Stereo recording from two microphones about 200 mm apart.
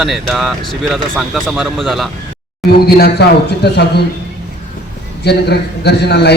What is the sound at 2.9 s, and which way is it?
Speech, 50° left (ahead or behind).